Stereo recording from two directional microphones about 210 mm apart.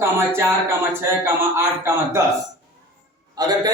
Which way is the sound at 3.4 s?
20° right (ahead or behind).